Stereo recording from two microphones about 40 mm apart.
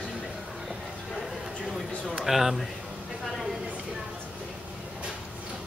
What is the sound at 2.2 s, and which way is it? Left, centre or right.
Speech, centre.